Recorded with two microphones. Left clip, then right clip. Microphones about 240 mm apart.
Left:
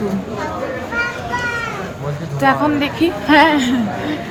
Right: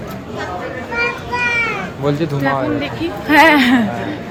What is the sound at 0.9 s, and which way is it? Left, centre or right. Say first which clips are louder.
Children playing: right 3 dB; right.